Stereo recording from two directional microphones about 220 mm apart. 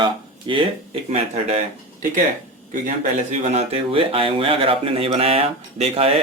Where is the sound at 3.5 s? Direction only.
30° right (ahead or behind).